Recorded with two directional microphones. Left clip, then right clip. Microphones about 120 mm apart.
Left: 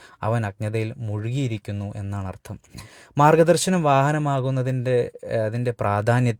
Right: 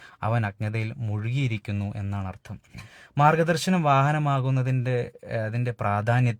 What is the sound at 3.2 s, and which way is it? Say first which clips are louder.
Speech: left 5 dB; 35° left (ahead or behind).